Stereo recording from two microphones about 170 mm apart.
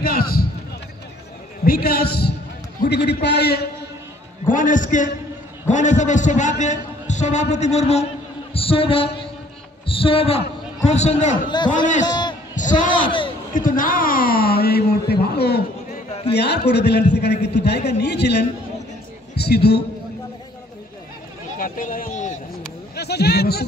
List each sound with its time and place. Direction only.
0.0 s run: 60° left (ahead or behind)
1.6 s speech: 60° left (ahead or behind)
3.1 s a man's voice: 80° left
4.5 s a man's voice: 50° left (ahead or behind)
11.3 s a man's voice: 25° left (ahead or behind)
12.1 s a sound: 25° left (ahead or behind)
12.5 s a man's voice: 50° left (ahead or behind); by 19.8 s 70° left (ahead or behind)
21.5 s a sound: 50° left (ahead or behind)
22.9 s speech: 70° left (ahead or behind)